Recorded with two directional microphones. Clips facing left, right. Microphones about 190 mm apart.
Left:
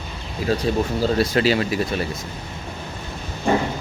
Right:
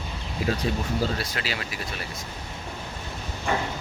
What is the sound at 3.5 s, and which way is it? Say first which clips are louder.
Rain: left 8 dB; 30° left (ahead or behind).